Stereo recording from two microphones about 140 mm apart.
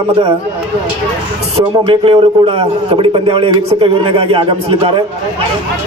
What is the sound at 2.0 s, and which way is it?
A man's voice, 40° right (ahead or behind).